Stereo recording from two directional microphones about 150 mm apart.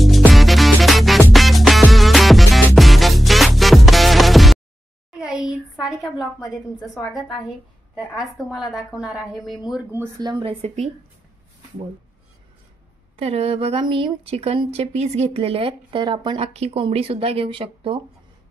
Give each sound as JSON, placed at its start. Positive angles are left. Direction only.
{"t": 0.3, "sound": "music", "side_deg": 0}
{"t": 5.1, "sound": "a sound", "side_deg": 0}
{"t": 7.1, "sound": "a woman's voice", "side_deg": 0}
{"t": 9.9, "sound": "speech", "side_deg": -25}
{"t": 10.4, "sound": "speech", "side_deg": -40}
{"t": 13.2, "sound": "speech", "side_deg": -40}
{"t": 16.5, "sound": "speech", "side_deg": -40}